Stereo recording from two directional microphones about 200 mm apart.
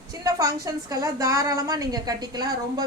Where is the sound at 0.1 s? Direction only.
15° right (ahead or behind).